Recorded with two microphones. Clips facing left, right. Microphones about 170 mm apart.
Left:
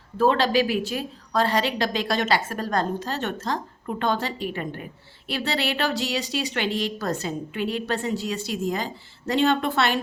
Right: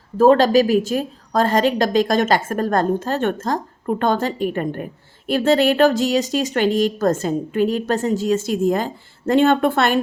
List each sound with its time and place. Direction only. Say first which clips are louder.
0.2 s a woman's voice: right 8 dB; 45° right (ahead or behind)